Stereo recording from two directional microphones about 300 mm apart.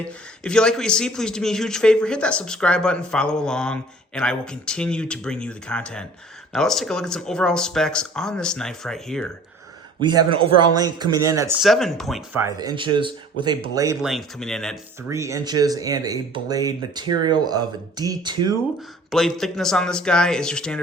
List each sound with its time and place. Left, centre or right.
0.4 s a man's voice: centre
10.0 s speech: centre
15.1 s speech: centre
19.1 s a man's voice: centre